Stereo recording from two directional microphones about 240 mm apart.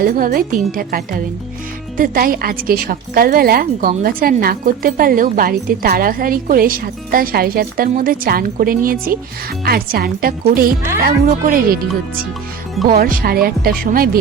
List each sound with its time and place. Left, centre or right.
0.0 s a woman's voice: right